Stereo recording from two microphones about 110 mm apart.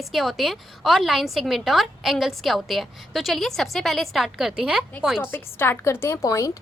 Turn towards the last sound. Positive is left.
turn(degrees=30)  # may be behind; listen again after turning